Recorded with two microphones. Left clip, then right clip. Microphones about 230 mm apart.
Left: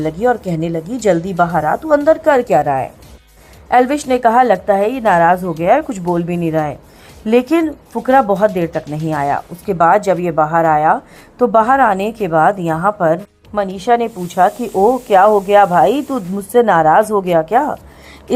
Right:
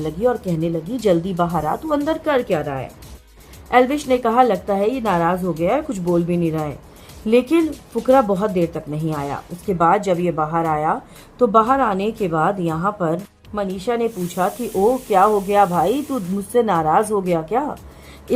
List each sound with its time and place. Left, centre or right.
0.0 s speech: centre